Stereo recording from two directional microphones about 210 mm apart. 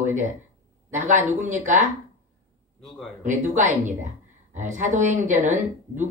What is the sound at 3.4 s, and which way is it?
Speech, 35° right (ahead or behind).